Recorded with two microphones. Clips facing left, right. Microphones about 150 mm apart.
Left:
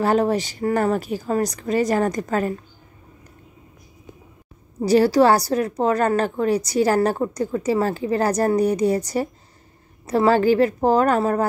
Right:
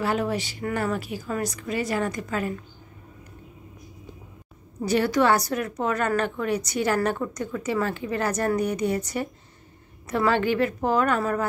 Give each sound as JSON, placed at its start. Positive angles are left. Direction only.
{"t": 0.0, "sound": "a woman's voice", "side_deg": 40}
{"t": 4.8, "sound": "a woman's voice", "side_deg": 35}